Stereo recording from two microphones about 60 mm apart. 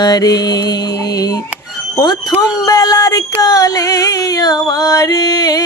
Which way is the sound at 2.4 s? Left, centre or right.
Left.